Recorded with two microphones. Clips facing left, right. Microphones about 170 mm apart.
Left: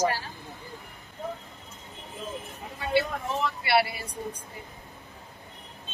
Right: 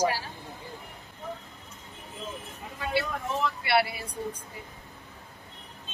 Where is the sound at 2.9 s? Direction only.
Centre (ahead or behind).